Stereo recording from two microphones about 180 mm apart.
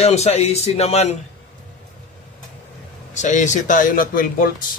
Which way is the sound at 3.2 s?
45° left (ahead or behind).